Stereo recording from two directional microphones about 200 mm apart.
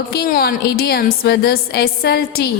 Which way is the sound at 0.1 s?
50° left (ahead or behind).